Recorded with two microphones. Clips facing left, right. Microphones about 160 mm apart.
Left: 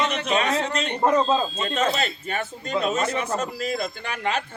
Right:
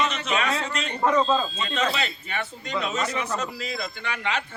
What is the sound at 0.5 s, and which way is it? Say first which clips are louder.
Speech: left 4 dB; 40° left (ahead or behind).